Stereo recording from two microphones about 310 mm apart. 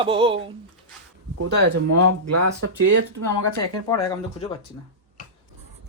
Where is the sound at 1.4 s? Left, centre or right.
Right.